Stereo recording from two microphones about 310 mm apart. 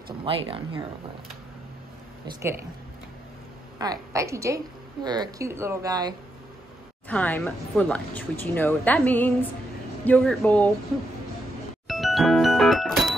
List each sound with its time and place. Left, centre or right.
0.2 s speech: centre
3.7 s speech: centre
7.1 s speech: centre
11.9 s music: centre